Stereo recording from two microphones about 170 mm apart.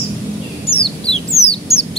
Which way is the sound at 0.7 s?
35° left (ahead or behind).